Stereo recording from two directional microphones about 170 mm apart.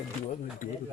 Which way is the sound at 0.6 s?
55° left (ahead or behind).